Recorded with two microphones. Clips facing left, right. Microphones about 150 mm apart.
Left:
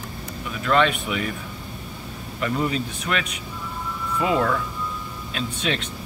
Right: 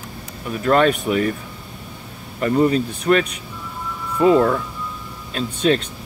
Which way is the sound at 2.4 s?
40° right (ahead or behind).